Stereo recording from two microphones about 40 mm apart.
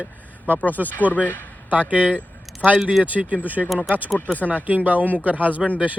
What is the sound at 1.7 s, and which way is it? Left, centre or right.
Speech, right.